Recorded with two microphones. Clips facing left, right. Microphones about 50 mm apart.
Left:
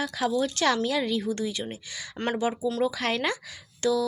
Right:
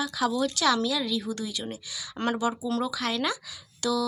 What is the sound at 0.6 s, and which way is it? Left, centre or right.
A woman's voice, left.